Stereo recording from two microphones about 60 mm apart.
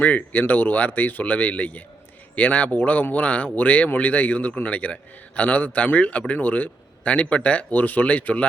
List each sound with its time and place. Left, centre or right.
0.0 s a man's voice: left